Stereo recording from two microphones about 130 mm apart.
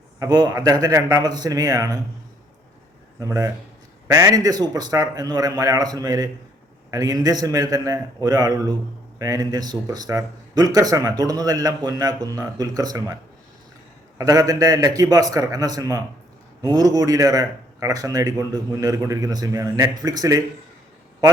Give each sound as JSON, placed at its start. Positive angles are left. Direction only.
{"t": 0.2, "sound": "speech", "side_deg": -30}
{"t": 3.2, "sound": "speech", "side_deg": -25}
{"t": 14.2, "sound": "speech", "side_deg": -30}